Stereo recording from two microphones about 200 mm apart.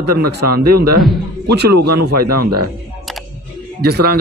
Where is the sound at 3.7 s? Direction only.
50° right (ahead or behind).